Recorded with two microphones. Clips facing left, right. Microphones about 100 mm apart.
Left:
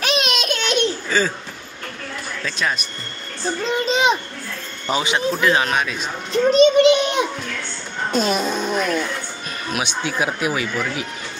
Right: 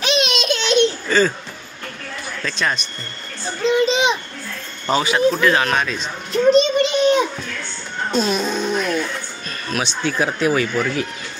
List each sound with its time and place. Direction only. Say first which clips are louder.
0.0 s a sound: right 2 dB; 50° left (ahead or behind)
1.0 s babbling: right 4 dB; 5° left (ahead or behind)
2.4 s speech: right 2 dB; 5° left (ahead or behind)
3.6 s music: right 3 dB; 45° left (ahead or behind)
4.9 s speech: right 4 dB; 20° left (ahead or behind)
6.5 s a child's voice: left 6 dB; 60° left (ahead or behind)
8.1 s music: even; 55° left (ahead or behind)
9.7 s speech: right 2 dB; 15° left (ahead or behind)